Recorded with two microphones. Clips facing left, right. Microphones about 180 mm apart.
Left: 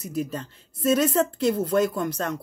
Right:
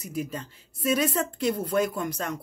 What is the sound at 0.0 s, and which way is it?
A woman's voice, 10° right (ahead or behind).